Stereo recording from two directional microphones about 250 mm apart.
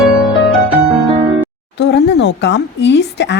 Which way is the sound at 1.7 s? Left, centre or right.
Left.